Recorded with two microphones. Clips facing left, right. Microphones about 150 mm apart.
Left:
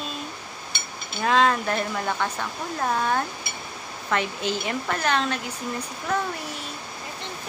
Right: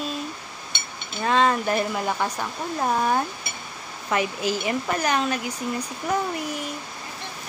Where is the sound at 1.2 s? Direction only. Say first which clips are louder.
Even; centre (ahead or behind).